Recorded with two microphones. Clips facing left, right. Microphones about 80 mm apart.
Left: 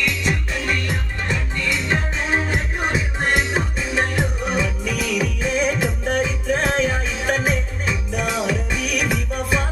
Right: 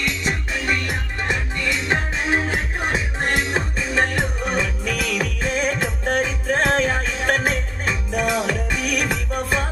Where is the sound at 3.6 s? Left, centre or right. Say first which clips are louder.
Right 1 dB; right.